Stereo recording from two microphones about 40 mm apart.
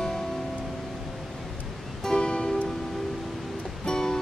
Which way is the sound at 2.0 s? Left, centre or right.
Centre.